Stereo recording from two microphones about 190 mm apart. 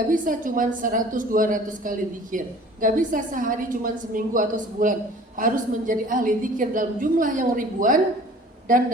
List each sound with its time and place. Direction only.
0.1 s a woman's voice: 45° right (ahead or behind)